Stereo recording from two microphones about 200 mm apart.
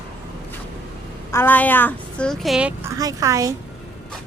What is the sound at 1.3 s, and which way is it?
A woman's voice, 10° left (ahead or behind).